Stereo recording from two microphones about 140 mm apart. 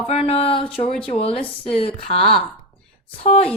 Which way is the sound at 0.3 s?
45° left (ahead or behind).